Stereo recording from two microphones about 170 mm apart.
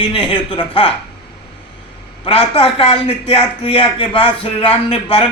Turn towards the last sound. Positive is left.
turn(degrees=35)  # may be behind; listen again after turning